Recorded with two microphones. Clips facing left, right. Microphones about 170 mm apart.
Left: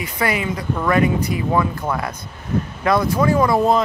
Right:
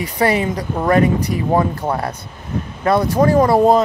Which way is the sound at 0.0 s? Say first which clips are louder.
Right 5 dB; 35° right (ahead or behind).